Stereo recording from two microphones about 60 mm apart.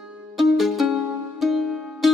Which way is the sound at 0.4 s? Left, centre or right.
Centre.